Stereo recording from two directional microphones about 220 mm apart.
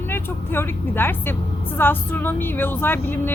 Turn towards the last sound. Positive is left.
turn(degrees=10)  # may be behind; listen again after turning